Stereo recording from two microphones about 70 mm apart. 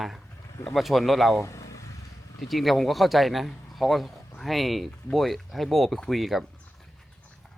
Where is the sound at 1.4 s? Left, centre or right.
Left.